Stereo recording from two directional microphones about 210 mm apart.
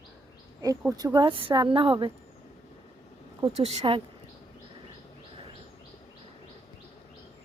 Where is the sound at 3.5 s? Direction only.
30° right (ahead or behind).